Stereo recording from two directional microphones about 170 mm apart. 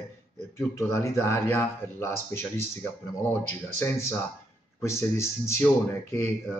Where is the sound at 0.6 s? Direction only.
15° left (ahead or behind).